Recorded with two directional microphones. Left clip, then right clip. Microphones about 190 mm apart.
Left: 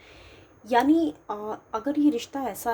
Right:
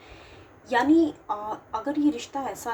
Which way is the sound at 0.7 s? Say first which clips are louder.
Even; 55° left (ahead or behind).